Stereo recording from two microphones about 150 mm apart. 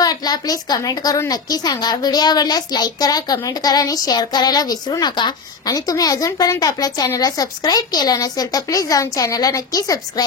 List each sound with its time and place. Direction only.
0.0 s a woman's voice: 25° left (ahead or behind)